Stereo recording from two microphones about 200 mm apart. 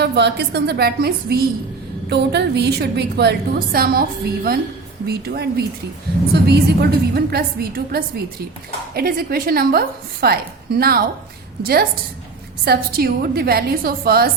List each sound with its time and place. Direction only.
0.0 s a woman's voice: 55° right (ahead or behind)
5.0 s a woman's voice: 50° right (ahead or behind)